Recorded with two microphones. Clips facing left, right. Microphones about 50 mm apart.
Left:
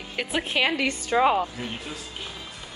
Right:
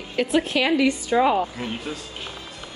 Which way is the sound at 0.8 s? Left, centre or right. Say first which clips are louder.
Right 3 dB; left.